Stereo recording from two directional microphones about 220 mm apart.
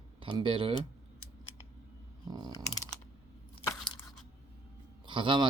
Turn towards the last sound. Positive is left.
turn(degrees=-20)  # may be behind; listen again after turning